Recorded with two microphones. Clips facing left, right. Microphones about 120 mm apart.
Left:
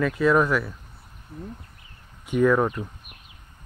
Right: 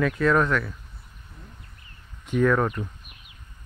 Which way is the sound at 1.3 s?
45° left (ahead or behind).